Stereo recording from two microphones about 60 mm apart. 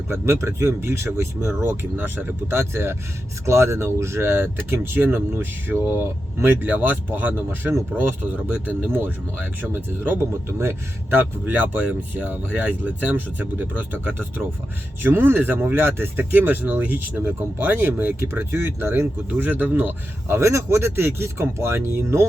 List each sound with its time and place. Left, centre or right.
0.1 s speech: right
1.6 s speech: right
10.2 s speech: right